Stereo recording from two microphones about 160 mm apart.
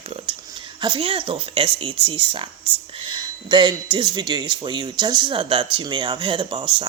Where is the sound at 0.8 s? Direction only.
30° right (ahead or behind).